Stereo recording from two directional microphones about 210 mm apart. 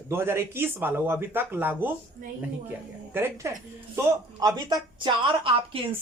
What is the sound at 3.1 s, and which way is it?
A woman's voice, 10° right (ahead or behind).